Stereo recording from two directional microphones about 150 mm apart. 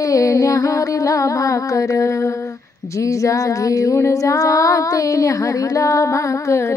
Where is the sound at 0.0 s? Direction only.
20° left (ahead or behind).